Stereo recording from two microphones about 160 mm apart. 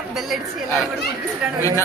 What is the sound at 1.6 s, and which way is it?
Speech, 20° left (ahead or behind).